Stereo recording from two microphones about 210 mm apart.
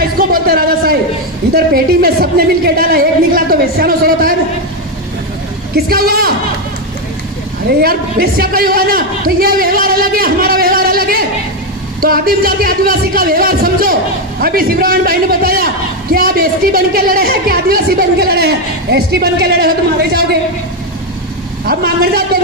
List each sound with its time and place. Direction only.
0.2 s a sound: 45° right (ahead or behind)
1.5 s a woman's voice: 45° right (ahead or behind)
5.7 s a woman's voice: 45° right (ahead or behind)
7.8 s a woman's voice: 45° right (ahead or behind)
21.7 s a woman's voice: 45° right (ahead or behind)